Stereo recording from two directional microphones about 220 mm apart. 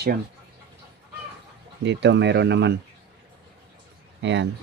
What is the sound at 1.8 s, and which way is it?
Speech, 50° right (ahead or behind).